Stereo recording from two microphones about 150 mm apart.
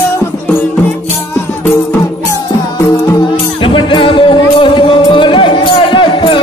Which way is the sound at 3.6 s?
35° left (ahead or behind).